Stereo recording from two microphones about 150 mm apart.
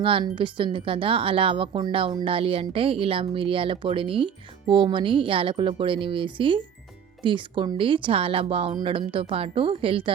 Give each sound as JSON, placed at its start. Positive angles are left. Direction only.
{"t": 0.0, "sound": "speech", "side_deg": -35}